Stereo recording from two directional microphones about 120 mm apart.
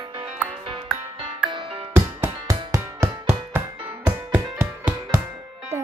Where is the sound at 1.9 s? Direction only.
15° right (ahead or behind).